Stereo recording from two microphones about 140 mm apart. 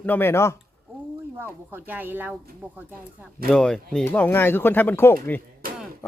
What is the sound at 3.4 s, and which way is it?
Speech, 5° left (ahead or behind).